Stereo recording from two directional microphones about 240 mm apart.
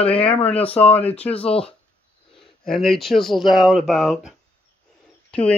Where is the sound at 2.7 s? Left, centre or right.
Centre.